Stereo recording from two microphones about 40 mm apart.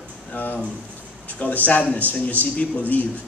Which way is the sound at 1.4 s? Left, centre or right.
Left.